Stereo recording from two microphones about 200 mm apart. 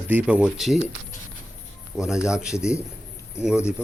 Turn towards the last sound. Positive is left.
turn(degrees=-5)  # may be behind; listen again after turning